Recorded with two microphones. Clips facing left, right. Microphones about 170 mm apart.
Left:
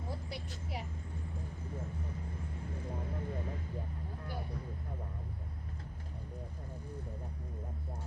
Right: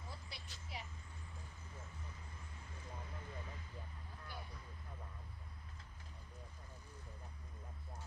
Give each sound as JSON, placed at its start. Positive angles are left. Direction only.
{"t": 3.0, "sound": "vehicle", "side_deg": 55}